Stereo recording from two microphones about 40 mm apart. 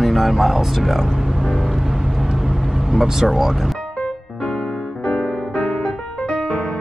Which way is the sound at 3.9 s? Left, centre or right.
Left.